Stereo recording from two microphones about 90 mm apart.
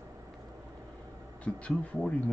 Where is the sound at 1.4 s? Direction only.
10° left (ahead or behind).